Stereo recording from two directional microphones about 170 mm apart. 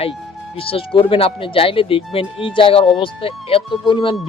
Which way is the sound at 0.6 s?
30° left (ahead or behind).